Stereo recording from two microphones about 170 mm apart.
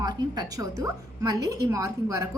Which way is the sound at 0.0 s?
25° right (ahead or behind).